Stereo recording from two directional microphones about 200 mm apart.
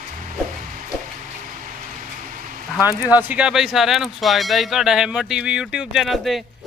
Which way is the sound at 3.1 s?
10° right (ahead or behind).